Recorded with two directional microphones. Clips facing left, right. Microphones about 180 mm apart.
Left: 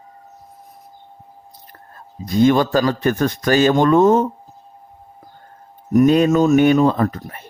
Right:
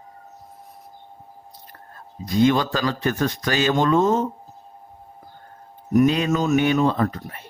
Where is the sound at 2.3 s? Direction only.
45° left (ahead or behind).